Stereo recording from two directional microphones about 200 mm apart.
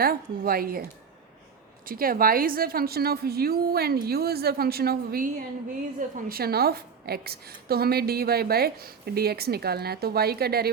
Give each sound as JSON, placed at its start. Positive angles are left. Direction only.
{"t": 0.0, "sound": "a woman's voice", "side_deg": -50}